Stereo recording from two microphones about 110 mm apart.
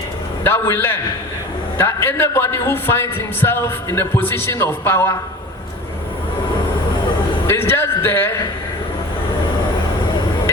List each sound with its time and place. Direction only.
0.4 s a man's voice: 20° left (ahead or behind)
7.4 s a man's voice: 20° left (ahead or behind)